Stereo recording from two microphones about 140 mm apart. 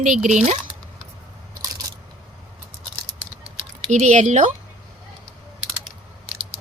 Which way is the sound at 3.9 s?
60° right (ahead or behind).